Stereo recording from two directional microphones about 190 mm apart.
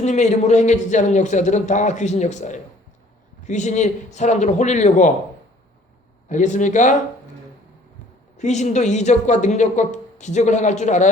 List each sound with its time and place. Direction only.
0.0 s speech: 35° left (ahead or behind)
6.2 s speech: 40° left (ahead or behind)
8.4 s speech: 40° left (ahead or behind)